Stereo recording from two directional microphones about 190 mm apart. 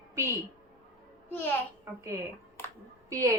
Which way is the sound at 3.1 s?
15° right (ahead or behind).